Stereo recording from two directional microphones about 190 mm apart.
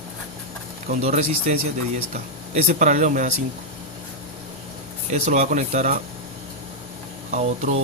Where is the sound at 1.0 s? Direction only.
40° right (ahead or behind).